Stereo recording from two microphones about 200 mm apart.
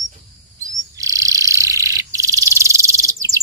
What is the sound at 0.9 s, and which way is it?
Frog, 15° right (ahead or behind).